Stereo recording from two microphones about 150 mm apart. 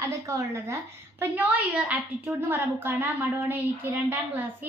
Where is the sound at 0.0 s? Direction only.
20° right (ahead or behind).